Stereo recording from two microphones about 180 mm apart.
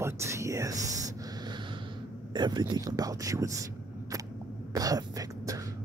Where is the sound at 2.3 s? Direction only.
25° right (ahead or behind).